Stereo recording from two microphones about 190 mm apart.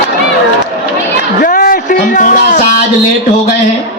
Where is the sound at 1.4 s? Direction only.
45° left (ahead or behind).